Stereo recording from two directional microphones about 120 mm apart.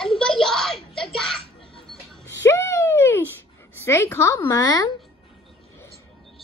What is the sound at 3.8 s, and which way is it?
A woman's voice, 20° left (ahead or behind).